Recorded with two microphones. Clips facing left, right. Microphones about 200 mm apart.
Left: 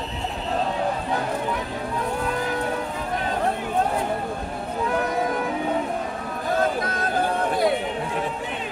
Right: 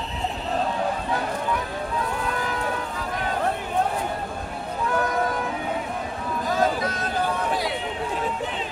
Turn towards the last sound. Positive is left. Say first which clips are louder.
# left 3 dB
turn(degrees=50)  # may be behind; listen again after turning